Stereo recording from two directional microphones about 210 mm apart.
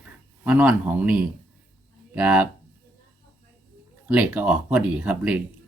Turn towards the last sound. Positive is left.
turn(degrees=-5)  # may be behind; listen again after turning